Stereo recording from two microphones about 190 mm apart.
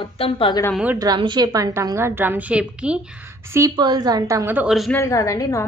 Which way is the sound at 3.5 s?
20° right (ahead or behind).